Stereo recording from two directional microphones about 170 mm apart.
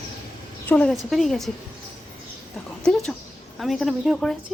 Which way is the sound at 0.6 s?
5° left (ahead or behind).